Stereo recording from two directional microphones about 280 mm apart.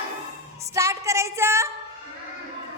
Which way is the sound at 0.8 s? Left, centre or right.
Centre.